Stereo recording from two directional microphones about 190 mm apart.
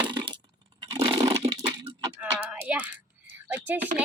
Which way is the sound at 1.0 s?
25° right (ahead or behind).